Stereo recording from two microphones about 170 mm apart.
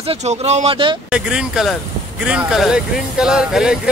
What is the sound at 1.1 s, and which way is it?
Speech, 5° right (ahead or behind).